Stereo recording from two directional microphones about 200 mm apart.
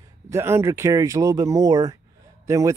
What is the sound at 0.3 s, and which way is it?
Speech, 15° right (ahead or behind).